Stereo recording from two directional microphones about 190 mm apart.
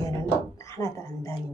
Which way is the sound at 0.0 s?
15° left (ahead or behind).